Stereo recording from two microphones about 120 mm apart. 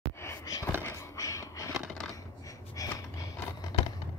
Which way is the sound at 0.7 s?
20° left (ahead or behind).